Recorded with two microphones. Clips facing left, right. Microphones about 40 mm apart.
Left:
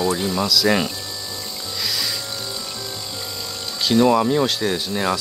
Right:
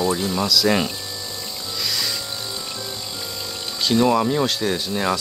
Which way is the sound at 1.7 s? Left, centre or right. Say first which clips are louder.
Even; centre.